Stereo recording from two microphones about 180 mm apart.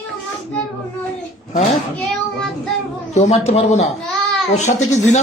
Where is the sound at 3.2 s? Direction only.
35° left (ahead or behind).